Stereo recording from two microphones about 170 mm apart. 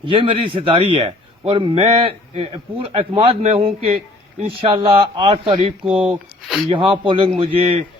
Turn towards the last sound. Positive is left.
turn(degrees=-35)  # may be behind; listen again after turning